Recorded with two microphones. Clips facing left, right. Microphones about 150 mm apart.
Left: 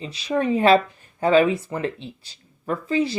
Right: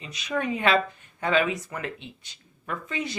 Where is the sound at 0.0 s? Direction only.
30° left (ahead or behind).